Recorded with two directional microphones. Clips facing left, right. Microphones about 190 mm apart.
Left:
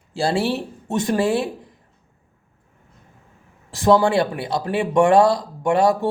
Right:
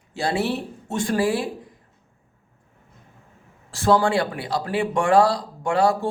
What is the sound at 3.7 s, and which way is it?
Speech, 20° left (ahead or behind).